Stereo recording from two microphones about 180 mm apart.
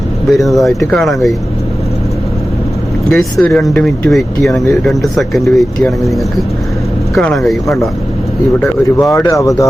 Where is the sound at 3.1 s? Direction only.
5° left (ahead or behind).